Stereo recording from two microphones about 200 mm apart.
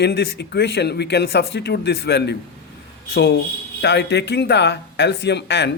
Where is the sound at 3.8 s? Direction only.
60° left (ahead or behind).